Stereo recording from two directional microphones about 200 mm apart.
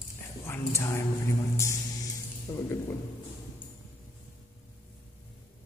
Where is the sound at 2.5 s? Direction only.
15° left (ahead or behind).